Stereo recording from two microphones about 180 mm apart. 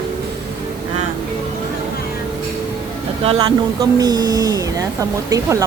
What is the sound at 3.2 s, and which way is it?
Speech, 25° right (ahead or behind).